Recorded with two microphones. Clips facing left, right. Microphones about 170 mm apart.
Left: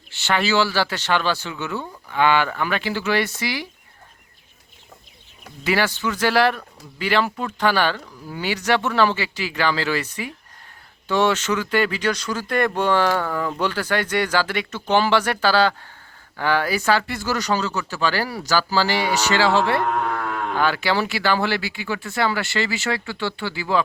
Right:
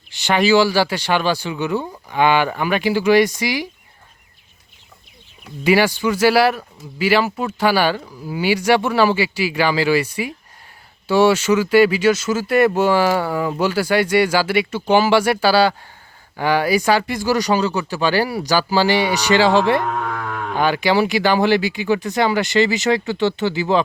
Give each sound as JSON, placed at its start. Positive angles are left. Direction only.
{"t": 0.1, "sound": "speech", "side_deg": -15}
{"t": 5.6, "sound": "speech", "side_deg": -15}